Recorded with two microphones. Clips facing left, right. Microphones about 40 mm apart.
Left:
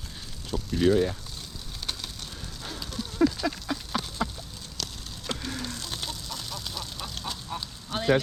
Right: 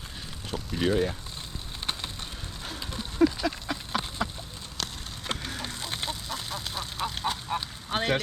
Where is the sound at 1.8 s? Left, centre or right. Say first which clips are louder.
Right 2 dB; right.